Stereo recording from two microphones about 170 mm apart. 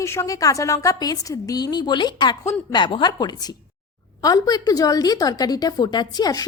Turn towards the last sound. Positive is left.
turn(degrees=20)  # may be behind; listen again after turning